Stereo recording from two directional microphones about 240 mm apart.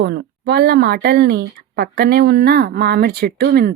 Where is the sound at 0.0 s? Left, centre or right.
Right.